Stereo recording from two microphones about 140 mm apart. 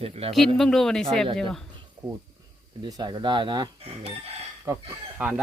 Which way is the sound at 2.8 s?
30° right (ahead or behind).